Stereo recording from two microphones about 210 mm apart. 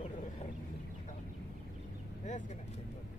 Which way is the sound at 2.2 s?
35° left (ahead or behind).